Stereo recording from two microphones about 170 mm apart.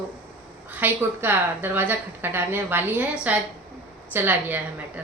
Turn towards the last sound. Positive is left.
turn(degrees=-10)  # may be behind; listen again after turning